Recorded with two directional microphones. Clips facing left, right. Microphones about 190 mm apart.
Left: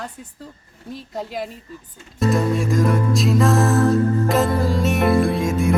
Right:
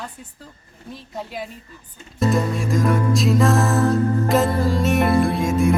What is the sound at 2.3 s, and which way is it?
Music, centre (ahead or behind).